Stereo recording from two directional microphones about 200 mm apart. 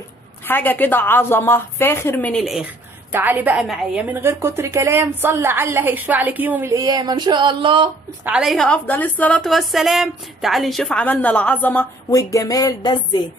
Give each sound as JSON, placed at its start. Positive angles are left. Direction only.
{"t": 0.4, "sound": "a woman's voice", "side_deg": 10}
{"t": 8.2, "sound": "a woman's voice", "side_deg": -5}